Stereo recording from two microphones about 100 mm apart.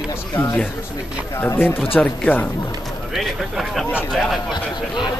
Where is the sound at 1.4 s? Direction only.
20° left (ahead or behind).